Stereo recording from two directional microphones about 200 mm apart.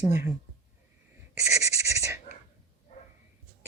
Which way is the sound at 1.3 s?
15° right (ahead or behind).